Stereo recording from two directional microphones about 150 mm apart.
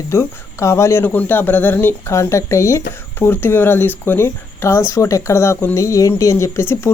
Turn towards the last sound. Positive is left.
turn(degrees=20)  # may be behind; listen again after turning